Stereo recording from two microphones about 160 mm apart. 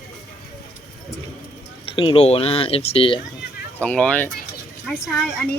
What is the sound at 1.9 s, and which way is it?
Speech, 35° left (ahead or behind).